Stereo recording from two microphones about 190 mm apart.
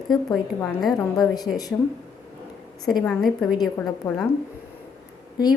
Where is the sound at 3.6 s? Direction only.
20° left (ahead or behind).